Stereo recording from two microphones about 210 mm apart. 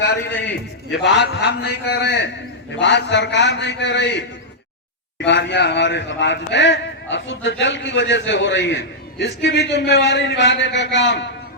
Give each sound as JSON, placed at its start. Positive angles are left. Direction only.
{"t": 0.0, "sound": "a man's voice", "side_deg": 60}
{"t": 5.2, "sound": "a man's voice", "side_deg": 55}